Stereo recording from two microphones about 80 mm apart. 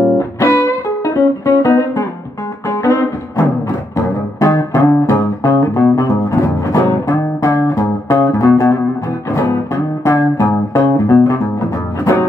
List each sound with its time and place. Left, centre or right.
0.2 s music: left